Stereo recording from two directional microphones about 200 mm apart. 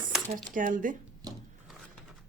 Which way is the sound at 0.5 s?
40° right (ahead or behind).